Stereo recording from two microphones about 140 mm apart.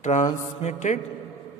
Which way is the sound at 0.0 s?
60° left (ahead or behind).